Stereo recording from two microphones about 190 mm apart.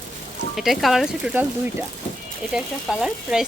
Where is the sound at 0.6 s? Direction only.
Centre (ahead or behind).